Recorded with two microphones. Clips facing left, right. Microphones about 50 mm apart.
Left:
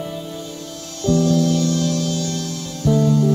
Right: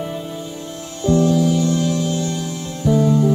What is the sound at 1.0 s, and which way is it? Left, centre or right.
Music, centre.